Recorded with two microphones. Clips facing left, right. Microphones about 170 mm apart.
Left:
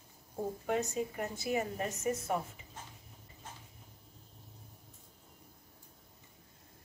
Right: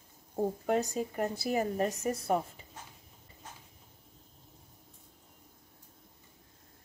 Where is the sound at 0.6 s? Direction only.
35° right (ahead or behind).